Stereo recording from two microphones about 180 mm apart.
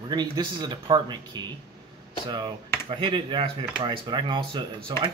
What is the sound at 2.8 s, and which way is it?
Speech, 30° right (ahead or behind).